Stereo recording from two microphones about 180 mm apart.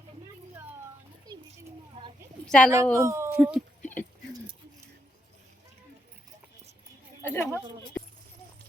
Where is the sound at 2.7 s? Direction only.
15° right (ahead or behind).